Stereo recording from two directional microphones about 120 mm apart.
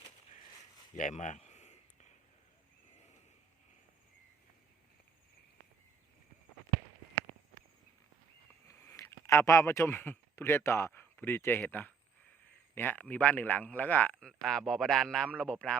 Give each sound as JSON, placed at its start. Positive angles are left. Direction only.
{"t": 0.9, "sound": "speech", "side_deg": 90}
{"t": 1.5, "sound": "a sound", "side_deg": 70}
{"t": 8.6, "sound": "speech", "side_deg": 20}